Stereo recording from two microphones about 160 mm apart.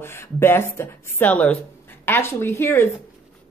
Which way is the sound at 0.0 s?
15° left (ahead or behind).